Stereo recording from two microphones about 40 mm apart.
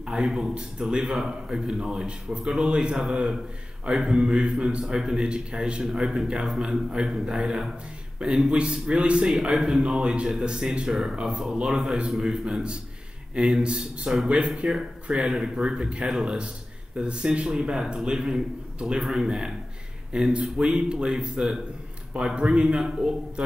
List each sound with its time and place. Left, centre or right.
0.2 s a man's voice: centre
9.5 s a man's voice: centre; by 22.8 s right